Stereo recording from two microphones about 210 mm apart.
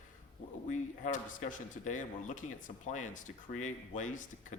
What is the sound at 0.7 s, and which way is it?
A man's voice, 35° left (ahead or behind).